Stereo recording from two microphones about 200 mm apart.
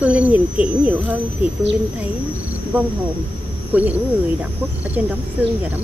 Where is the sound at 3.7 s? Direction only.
10° right (ahead or behind).